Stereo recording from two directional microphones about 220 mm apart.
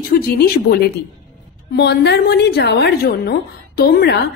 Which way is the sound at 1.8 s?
50° left (ahead or behind).